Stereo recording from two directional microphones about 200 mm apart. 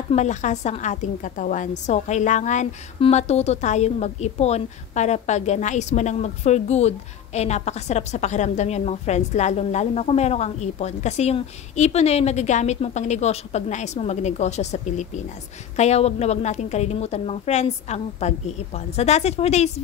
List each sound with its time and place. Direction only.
0.1 s a woman's voice: 35° left (ahead or behind)